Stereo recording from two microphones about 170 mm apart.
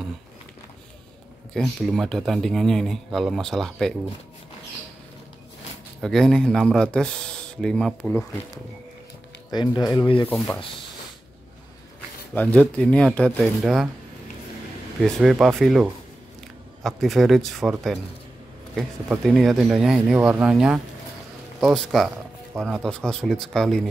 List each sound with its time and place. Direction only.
1.5 s speech: centre (ahead or behind)
5.9 s speech: centre (ahead or behind)
9.5 s speech: 25° left (ahead or behind)
12.4 s speech: 5° left (ahead or behind)
15.0 s speech: centre (ahead or behind)
22.5 s speech: 20° right (ahead or behind)
22.8 s speech: 5° left (ahead or behind)